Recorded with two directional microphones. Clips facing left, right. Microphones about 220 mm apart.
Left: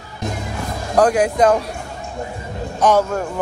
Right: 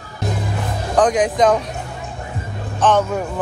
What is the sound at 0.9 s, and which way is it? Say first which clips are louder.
Speech: left 1 dB; 10° left (ahead or behind).